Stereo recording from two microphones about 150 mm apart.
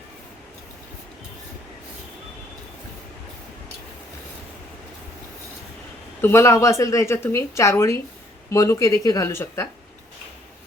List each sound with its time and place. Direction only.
6.2 s a woman's voice: 20° left (ahead or behind)